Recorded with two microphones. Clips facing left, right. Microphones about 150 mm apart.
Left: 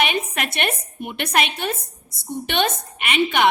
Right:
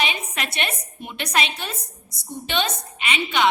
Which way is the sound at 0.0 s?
55° left (ahead or behind).